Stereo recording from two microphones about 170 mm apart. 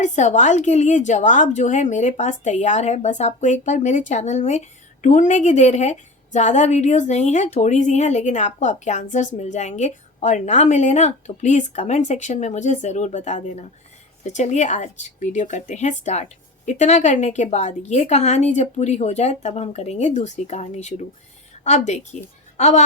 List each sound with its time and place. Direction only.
0.0 s a woman's voice: 45° left (ahead or behind)